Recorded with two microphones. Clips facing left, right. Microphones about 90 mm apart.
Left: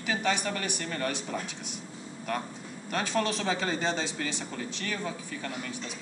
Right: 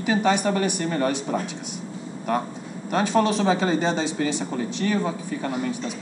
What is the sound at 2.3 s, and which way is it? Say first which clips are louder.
Speech: right 8 dB; 15° right (ahead or behind).